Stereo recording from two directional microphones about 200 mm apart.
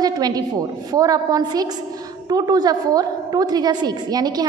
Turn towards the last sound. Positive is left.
turn(degrees=-20)  # may be behind; listen again after turning